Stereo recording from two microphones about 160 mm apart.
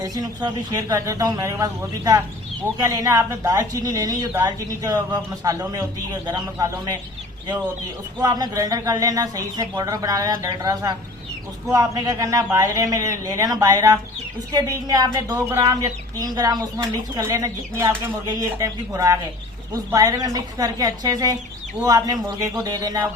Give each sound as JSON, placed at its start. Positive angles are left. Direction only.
{"t": 0.0, "sound": "speech", "side_deg": -25}
{"t": 8.2, "sound": "speech", "side_deg": -25}